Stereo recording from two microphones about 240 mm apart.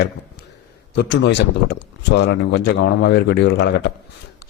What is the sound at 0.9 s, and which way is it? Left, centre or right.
Speech, left.